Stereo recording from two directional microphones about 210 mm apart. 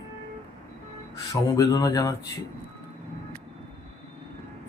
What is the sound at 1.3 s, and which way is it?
Speech, 15° left (ahead or behind).